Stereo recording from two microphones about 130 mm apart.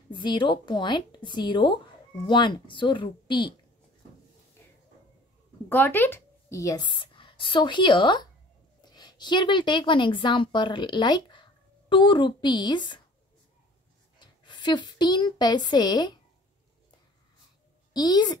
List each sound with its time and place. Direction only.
0.1 s a woman's voice: 35° left (ahead or behind)
5.7 s a woman's voice: 15° left (ahead or behind); by 13.0 s 35° left (ahead or behind)
14.2 s a woman's voice: 35° left (ahead or behind)
17.9 s a woman's voice: 30° left (ahead or behind)